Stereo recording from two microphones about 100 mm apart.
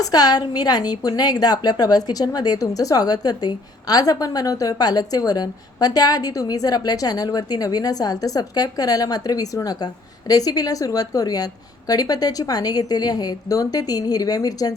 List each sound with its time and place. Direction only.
0.0 s a woman's voice: 40° left (ahead or behind)